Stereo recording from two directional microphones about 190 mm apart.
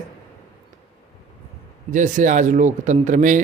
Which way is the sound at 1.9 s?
40° right (ahead or behind).